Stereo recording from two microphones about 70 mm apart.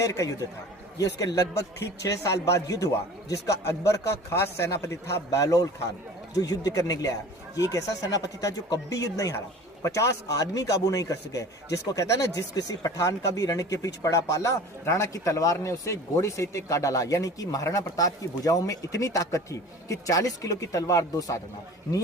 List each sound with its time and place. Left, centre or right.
0.0 s a man's voice: left
6.3 s a man's voice: left